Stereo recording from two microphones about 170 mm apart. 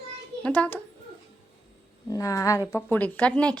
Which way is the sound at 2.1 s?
20° left (ahead or behind).